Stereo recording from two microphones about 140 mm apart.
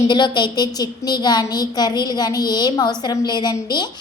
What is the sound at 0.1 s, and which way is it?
A woman's voice, 30° left (ahead or behind).